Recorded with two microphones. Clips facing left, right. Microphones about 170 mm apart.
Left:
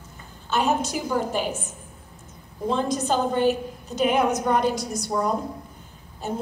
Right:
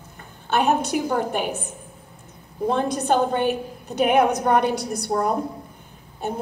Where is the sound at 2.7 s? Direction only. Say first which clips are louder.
Right 2 dB; 60° right (ahead or behind).